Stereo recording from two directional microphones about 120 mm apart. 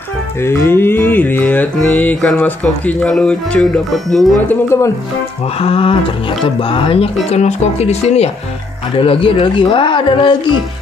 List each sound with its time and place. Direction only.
0.4 s music: 20° left (ahead or behind); by 4.3 s centre (ahead or behind)
4.5 s speech: 25° left (ahead or behind)
5.6 s speech: 50° left (ahead or behind)
7.2 s speech: 65° left (ahead or behind)
8.9 s speech: 50° left (ahead or behind)